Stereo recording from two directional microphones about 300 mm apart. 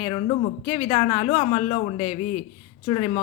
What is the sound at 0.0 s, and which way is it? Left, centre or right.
A woman's voice, centre.